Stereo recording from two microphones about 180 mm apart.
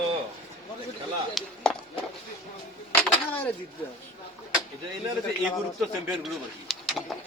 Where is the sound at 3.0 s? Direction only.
10° left (ahead or behind).